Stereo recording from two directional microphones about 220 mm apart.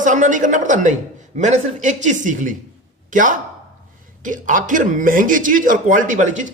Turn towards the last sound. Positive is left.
turn(degrees=-35)  # may be behind; listen again after turning